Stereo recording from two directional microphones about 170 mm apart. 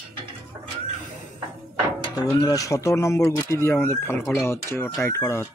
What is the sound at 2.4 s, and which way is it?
Speech, 20° left (ahead or behind).